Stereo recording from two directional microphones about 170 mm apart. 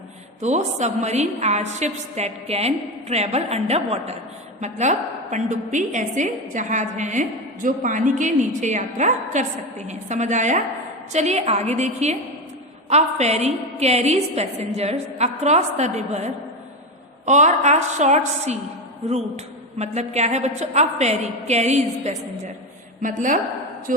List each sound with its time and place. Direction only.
0.4 s a woman's voice: 40° right (ahead or behind)
19.8 s a woman's voice: 40° right (ahead or behind)